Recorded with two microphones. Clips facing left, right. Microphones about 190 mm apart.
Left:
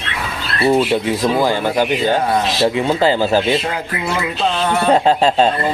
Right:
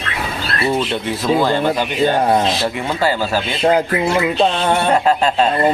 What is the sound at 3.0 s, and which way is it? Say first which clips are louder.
Speech: left 2 dB; 20° left (ahead or behind).